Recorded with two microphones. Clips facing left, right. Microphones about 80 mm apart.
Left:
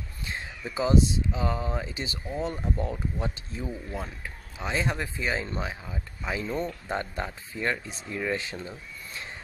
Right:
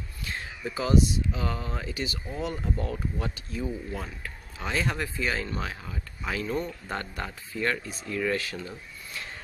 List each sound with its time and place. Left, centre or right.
0.2 s speech: left